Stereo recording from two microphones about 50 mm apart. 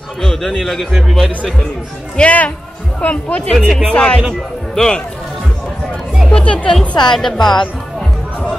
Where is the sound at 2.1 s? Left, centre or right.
Left.